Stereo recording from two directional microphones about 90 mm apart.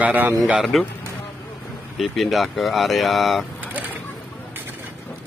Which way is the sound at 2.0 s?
Centre (ahead or behind).